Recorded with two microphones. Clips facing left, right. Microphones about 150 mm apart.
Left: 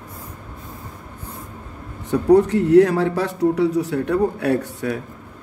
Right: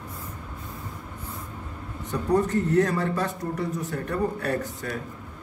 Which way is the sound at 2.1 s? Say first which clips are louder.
Left 9 dB; 65° left (ahead or behind).